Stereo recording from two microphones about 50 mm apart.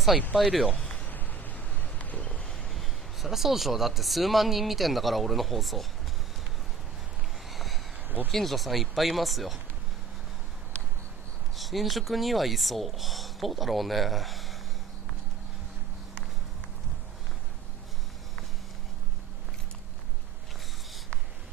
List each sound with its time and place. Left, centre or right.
0.3 s speech: centre
1.0 s a sound: left
2.4 s speech: centre
7.5 s a sound: centre
8.3 s speech: centre
11.5 s speech: centre